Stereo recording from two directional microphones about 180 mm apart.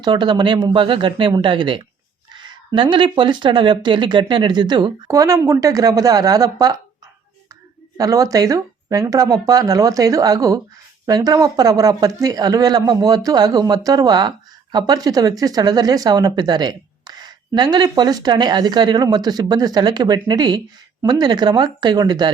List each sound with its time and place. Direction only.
0.0 s speech: 25° right (ahead or behind)
7.9 s speech: 20° right (ahead or behind)